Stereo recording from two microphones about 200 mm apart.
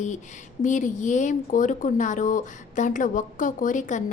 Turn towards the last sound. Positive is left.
turn(degrees=40)  # may be behind; listen again after turning